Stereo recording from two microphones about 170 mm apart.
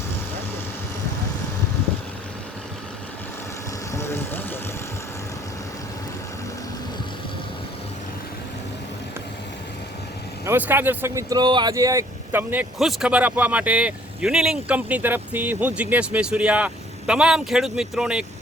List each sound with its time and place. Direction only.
3.9 s vehicle: 15° left (ahead or behind)
10.4 s speech: 10° right (ahead or behind)